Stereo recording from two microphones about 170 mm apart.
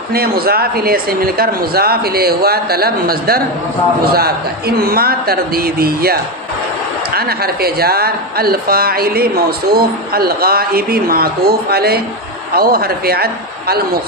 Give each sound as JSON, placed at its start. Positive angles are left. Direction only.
{"t": 0.1, "sound": "speech", "side_deg": -65}